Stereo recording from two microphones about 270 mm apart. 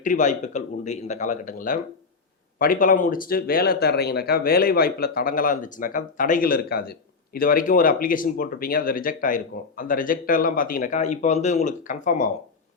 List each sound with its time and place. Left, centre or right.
0.0 s speech: left